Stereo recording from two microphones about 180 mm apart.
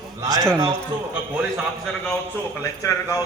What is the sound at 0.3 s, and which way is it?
Speech, 20° right (ahead or behind).